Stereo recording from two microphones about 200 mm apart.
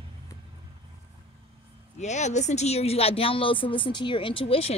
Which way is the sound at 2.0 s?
35° left (ahead or behind).